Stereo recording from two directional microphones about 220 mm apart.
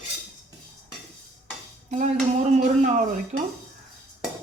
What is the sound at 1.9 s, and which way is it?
Speech, 30° right (ahead or behind).